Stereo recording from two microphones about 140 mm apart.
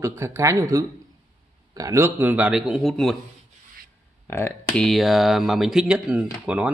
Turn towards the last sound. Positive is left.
turn(degrees=-10)  # may be behind; listen again after turning